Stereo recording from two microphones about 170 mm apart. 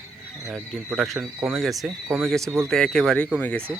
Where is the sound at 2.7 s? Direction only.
Centre (ahead or behind).